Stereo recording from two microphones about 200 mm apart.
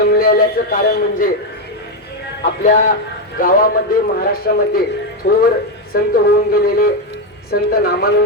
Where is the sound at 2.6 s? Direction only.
40° left (ahead or behind).